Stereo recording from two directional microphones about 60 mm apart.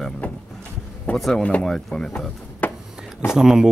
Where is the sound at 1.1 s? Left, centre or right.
Left; by 2.1 s centre.